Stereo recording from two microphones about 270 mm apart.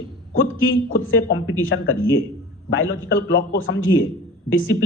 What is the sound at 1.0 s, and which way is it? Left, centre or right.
A man's voice, left.